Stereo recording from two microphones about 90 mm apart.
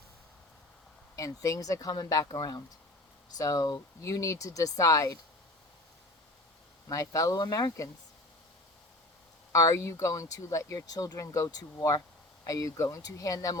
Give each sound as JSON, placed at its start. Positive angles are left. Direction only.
{"t": 1.1, "sound": "speech", "side_deg": 35}
{"t": 6.8, "sound": "speech", "side_deg": 35}
{"t": 9.5, "sound": "speech", "side_deg": 35}